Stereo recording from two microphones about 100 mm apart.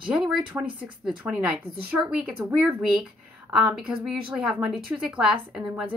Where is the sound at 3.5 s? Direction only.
10° right (ahead or behind).